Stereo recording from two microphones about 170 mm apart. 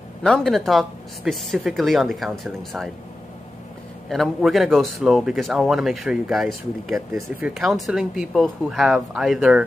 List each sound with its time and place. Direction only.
0.2 s speech: 5° left (ahead or behind)
4.1 s speech: centre (ahead or behind)